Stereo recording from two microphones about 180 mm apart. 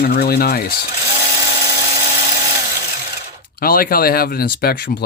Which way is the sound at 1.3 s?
20° right (ahead or behind).